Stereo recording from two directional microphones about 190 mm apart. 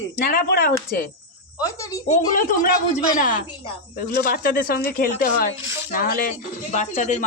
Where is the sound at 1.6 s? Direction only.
20° left (ahead or behind).